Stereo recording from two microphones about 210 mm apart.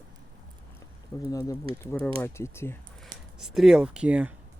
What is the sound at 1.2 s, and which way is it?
Speech, 15° left (ahead or behind).